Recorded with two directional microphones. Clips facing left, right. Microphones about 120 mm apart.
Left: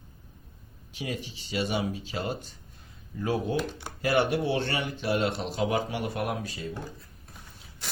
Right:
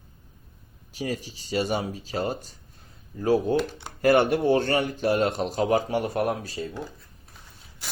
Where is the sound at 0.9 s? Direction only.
40° right (ahead or behind).